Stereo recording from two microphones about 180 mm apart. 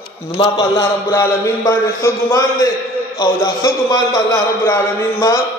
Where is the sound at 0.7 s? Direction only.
15° left (ahead or behind).